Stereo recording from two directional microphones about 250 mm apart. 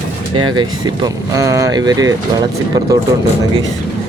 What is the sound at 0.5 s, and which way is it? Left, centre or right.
Speech, centre.